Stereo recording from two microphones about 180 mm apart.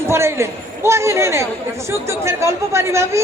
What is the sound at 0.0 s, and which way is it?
Speech, 15° right (ahead or behind).